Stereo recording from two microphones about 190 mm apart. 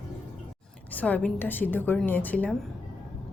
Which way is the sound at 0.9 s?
10° left (ahead or behind).